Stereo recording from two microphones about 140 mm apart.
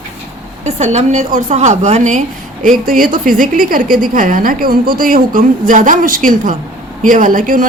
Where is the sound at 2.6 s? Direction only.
85° right.